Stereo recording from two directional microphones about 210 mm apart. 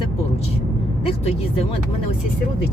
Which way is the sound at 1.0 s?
25° left (ahead or behind).